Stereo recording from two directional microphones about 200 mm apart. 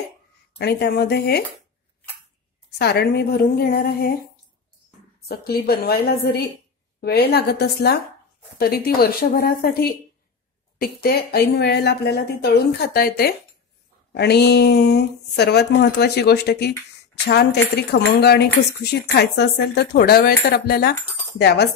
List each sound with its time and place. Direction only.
0.6 s speech: 55° left (ahead or behind)
2.8 s speech: 55° left (ahead or behind)
5.3 s speech: 50° left (ahead or behind)